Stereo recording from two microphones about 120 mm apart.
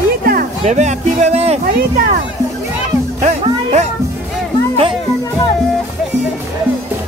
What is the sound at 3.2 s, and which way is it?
Music, 70° right (ahead or behind).